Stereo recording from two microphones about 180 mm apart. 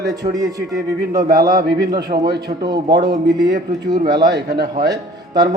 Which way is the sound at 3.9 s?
25° right (ahead or behind).